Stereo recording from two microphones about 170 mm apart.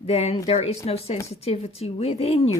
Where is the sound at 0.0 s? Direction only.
35° left (ahead or behind).